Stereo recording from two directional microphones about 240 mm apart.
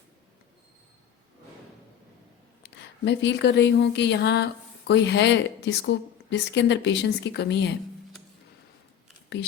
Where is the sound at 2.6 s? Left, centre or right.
Left.